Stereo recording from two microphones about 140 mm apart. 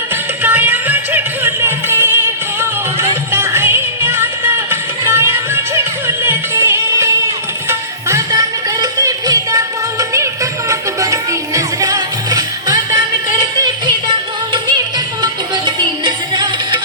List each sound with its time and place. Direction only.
0.4 s music: 15° right (ahead or behind); by 16.5 s 35° right (ahead or behind)